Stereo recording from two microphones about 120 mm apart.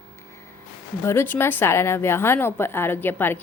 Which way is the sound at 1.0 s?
20° left (ahead or behind).